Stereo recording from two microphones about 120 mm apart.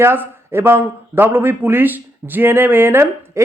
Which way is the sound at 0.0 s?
20° right (ahead or behind).